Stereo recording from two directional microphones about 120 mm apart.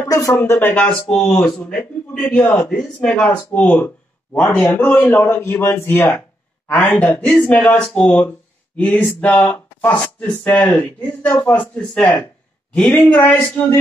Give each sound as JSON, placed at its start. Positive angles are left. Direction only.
{"t": 0.3, "sound": "speech", "side_deg": 15}